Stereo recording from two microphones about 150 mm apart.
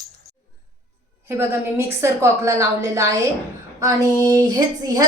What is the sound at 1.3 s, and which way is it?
A woman's voice, 15° right (ahead or behind).